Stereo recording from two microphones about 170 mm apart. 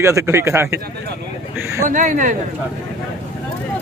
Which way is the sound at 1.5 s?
15° right (ahead or behind).